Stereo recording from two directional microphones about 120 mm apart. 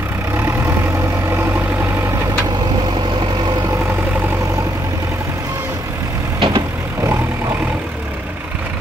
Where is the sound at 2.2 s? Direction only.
30° right (ahead or behind).